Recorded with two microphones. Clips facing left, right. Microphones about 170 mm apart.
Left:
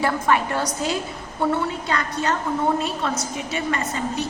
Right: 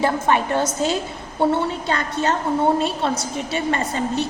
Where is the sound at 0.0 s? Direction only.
25° right (ahead or behind).